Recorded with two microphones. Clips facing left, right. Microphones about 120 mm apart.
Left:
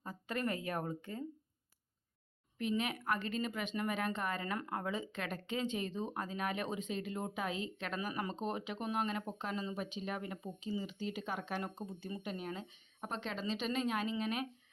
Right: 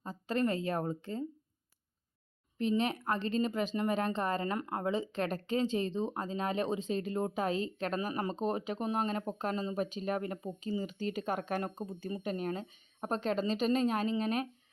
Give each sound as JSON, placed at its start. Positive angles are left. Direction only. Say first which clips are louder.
{"t": 0.0, "sound": "a woman's voice", "louder": "right 6 dB", "side_deg": -30}
{"t": 2.6, "sound": "speech", "louder": "right 5 dB", "side_deg": -30}